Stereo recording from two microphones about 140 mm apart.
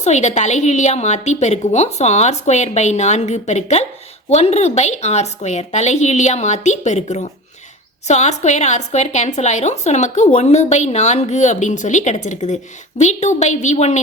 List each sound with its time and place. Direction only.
0.0 s a woman's voice: 55° left (ahead or behind)